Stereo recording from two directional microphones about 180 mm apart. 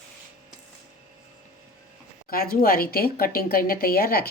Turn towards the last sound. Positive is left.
turn(degrees=55)  # may be behind; listen again after turning